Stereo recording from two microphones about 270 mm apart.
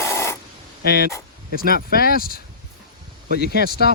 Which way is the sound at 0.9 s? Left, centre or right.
Left.